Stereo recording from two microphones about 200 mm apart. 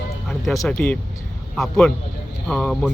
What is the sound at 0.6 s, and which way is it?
Speech, 5° left (ahead or behind).